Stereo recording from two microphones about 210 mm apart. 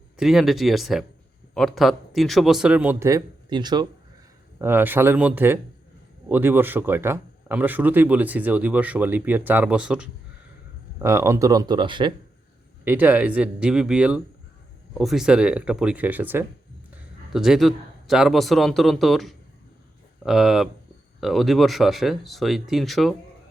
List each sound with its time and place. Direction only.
0.2 s speech: centre (ahead or behind); by 3.8 s 20° right (ahead or behind)
4.6 s speech: 10° right (ahead or behind)
12.8 s speech: 10° right (ahead or behind)